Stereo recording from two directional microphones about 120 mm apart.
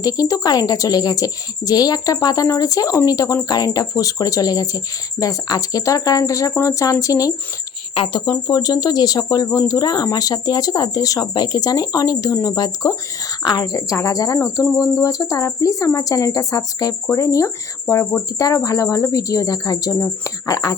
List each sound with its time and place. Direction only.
0.0 s speech: 30° left (ahead or behind)
7.9 s speech: 45° left (ahead or behind)